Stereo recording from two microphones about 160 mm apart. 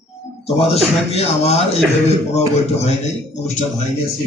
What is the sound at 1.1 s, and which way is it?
A man's voice, 40° left (ahead or behind).